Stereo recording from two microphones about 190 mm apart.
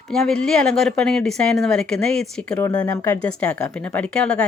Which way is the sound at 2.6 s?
20° left (ahead or behind).